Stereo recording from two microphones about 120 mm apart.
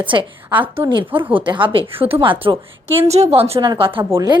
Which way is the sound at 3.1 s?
60° right (ahead or behind).